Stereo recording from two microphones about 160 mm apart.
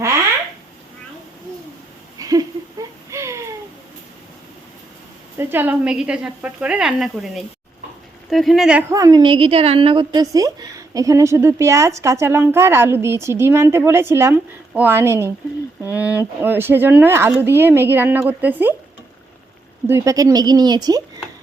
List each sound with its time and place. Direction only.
2.1 s a sound: 20° right (ahead or behind)
5.4 s a woman's voice: 15° right (ahead or behind)
8.9 s a woman's voice: 20° right (ahead or behind)
19.9 s speech: 20° right (ahead or behind)